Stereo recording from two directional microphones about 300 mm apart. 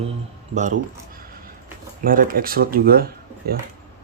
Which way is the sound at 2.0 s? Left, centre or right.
Right.